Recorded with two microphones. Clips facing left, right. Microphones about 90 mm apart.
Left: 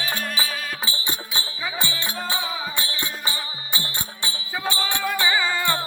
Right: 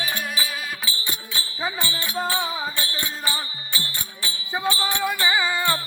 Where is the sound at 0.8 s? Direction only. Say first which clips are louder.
Left 2 dB; 30° left (ahead or behind).